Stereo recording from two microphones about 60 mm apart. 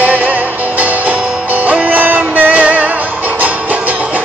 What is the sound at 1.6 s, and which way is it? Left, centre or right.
Music, right.